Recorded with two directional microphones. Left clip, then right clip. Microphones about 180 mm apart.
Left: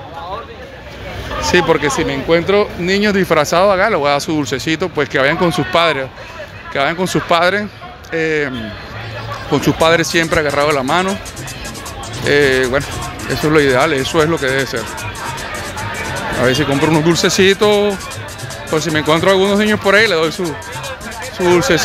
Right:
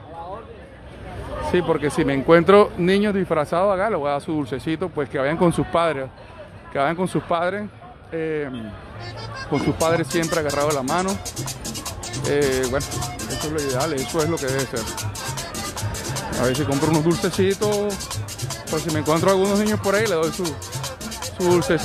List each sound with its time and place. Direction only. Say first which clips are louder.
1.5 s speech: left 8 dB; 5° right (ahead or behind)
2.0 s speech: left 2 dB; 30° right (ahead or behind)
2.9 s speech: left 7 dB; 5° right (ahead or behind)
12.3 s speech: left 9 dB; 5° right (ahead or behind)
13.8 s speech: left 9 dB; 5° right (ahead or behind)
16.3 s speech: left 8 dB; 5° right (ahead or behind)